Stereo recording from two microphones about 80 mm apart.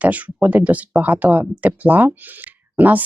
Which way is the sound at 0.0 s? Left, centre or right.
Centre.